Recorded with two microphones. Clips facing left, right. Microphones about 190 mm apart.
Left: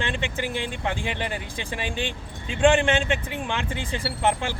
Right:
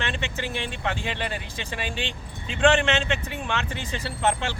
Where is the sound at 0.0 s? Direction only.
15° left (ahead or behind).